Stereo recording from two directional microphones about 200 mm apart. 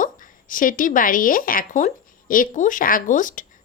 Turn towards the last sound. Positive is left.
turn(degrees=40)  # may be behind; listen again after turning